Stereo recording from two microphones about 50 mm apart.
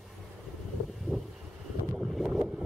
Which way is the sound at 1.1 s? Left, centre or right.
Right.